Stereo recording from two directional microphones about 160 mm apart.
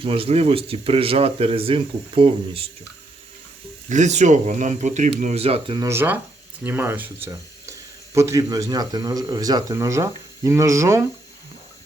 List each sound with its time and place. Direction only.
0.0 s speech: 35° right (ahead or behind)
3.8 s speech: 45° right (ahead or behind)
5.8 s speech: 15° right (ahead or behind)